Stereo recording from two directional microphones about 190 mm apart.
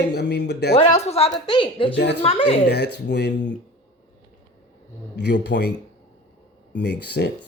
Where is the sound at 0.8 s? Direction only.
35° left (ahead or behind).